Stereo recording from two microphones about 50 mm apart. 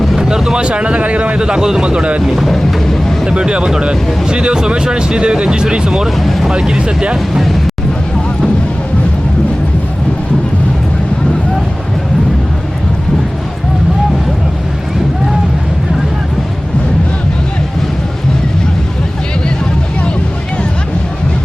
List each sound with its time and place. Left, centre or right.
0.2 s vehicle: centre
0.6 s speech: right
2.2 s a sound: centre
3.2 s speech: centre
6.1 s speech: centre
6.5 s speech: centre